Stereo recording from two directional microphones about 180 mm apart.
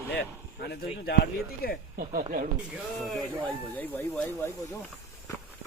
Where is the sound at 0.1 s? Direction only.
65° left (ahead or behind).